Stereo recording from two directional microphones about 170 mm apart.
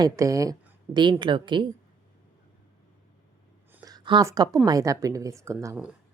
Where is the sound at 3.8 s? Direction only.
25° right (ahead or behind).